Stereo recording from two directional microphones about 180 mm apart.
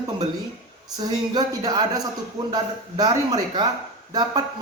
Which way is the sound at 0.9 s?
20° right (ahead or behind).